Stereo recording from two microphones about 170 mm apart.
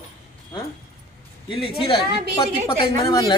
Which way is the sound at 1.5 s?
35° left (ahead or behind).